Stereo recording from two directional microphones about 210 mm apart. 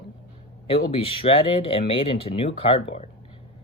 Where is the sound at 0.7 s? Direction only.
25° left (ahead or behind).